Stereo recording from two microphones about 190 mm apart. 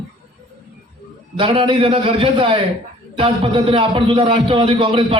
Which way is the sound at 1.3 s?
30° right (ahead or behind).